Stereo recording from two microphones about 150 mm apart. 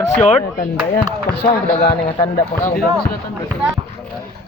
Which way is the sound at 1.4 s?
90° left.